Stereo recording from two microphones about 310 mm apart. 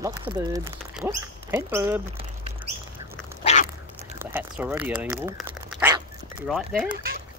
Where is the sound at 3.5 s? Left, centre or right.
Left.